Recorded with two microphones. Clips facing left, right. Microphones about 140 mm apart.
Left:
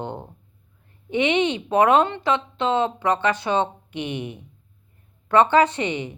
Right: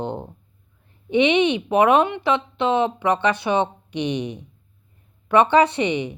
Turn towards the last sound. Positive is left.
turn(degrees=-15)  # may be behind; listen again after turning